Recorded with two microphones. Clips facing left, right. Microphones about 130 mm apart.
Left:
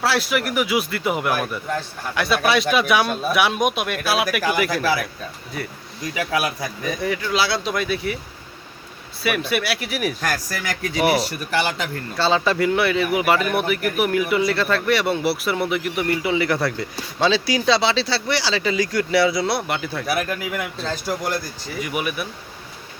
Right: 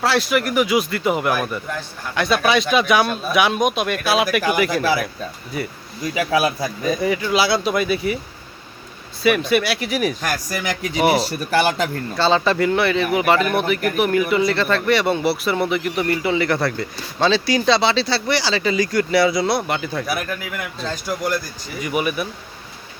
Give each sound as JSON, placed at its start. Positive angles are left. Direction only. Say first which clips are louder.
{"t": 0.0, "sound": "speech", "louder": "right 2 dB", "side_deg": 5}
{"t": 4.7, "sound": "speech", "louder": "right 2 dB", "side_deg": -25}
{"t": 5.5, "sound": "speech", "louder": "right 4 dB", "side_deg": -5}
{"t": 6.1, "sound": "speech", "louder": "right 4 dB", "side_deg": -30}
{"t": 7.0, "sound": "speech", "louder": "right 2 dB", "side_deg": -5}
{"t": 9.2, "sound": "speech", "louder": "right 5 dB", "side_deg": 5}
{"t": 10.2, "sound": "speech", "louder": "right 2 dB", "side_deg": -15}
{"t": 11.1, "sound": "speech", "louder": "right 3 dB", "side_deg": -30}
{"t": 12.1, "sound": "speech", "louder": "right 1 dB", "side_deg": 5}